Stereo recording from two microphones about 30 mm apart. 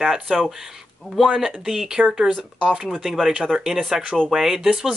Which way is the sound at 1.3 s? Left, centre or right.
Centre.